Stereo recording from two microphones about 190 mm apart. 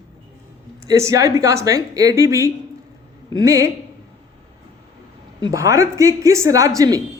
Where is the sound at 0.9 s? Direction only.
15° right (ahead or behind).